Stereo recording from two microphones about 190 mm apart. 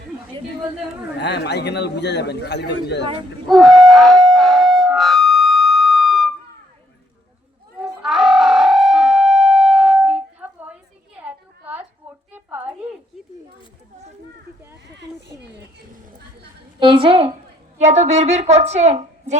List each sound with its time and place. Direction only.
1.2 s a man's voice: 60° left (ahead or behind)
3.5 s siren: centre (ahead or behind)
7.8 s music: centre (ahead or behind)
11.2 s a sound: 10° right (ahead or behind)
16.8 s a sound: 25° right (ahead or behind)
17.7 s a woman's voice: 35° right (ahead or behind)